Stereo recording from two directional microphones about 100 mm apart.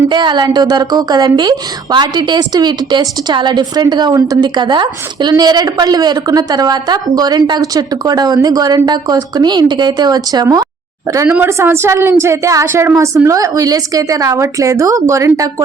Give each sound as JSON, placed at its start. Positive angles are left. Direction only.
{"t": 0.1, "sound": "a woman's voice", "side_deg": -50}
{"t": 11.4, "sound": "a woman's voice", "side_deg": -25}